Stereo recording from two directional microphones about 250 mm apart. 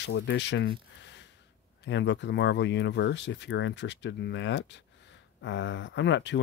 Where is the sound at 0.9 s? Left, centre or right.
Left.